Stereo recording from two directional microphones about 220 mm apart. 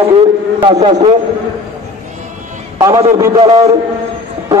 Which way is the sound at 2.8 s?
15° right (ahead or behind).